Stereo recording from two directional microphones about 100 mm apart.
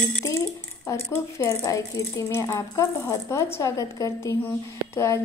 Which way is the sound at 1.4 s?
30° left (ahead or behind).